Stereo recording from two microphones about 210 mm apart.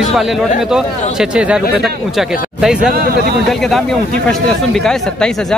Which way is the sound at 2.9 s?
45° right (ahead or behind).